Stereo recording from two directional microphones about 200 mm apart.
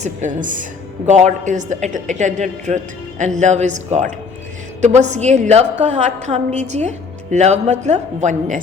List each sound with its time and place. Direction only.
0.0 s a woman's voice: 40° right (ahead or behind)